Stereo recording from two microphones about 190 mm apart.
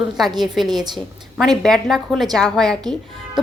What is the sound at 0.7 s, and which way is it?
Speech, 20° right (ahead or behind).